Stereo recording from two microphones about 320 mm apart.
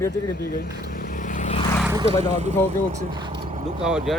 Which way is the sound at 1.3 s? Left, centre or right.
Left.